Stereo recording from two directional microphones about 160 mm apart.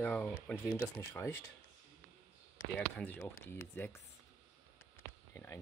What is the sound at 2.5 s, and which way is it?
Speech, 10° left (ahead or behind).